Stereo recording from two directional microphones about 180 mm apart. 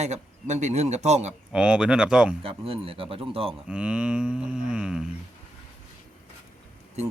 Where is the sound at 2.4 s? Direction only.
30° right (ahead or behind).